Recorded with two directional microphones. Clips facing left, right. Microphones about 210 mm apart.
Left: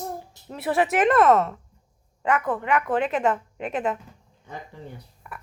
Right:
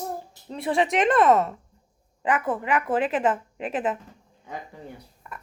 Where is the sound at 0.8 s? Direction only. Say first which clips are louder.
Left 1 dB; 5° left (ahead or behind).